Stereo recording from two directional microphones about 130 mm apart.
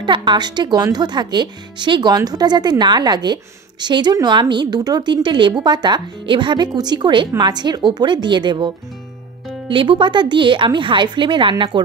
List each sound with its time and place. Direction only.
0.0 s speech: 35° right (ahead or behind)